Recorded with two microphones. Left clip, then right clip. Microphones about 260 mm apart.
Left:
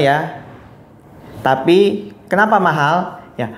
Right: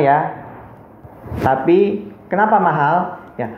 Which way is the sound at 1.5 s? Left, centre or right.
Left.